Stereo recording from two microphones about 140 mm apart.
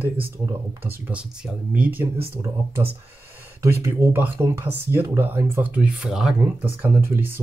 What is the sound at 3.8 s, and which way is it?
Speech, 15° right (ahead or behind).